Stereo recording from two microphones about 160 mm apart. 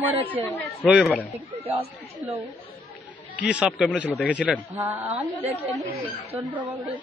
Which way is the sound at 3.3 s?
5° right (ahead or behind).